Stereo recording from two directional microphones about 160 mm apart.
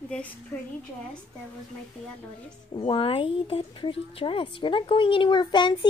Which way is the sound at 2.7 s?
30° left (ahead or behind).